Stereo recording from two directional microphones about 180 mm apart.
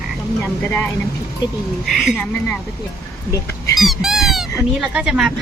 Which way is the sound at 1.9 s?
Centre (ahead or behind).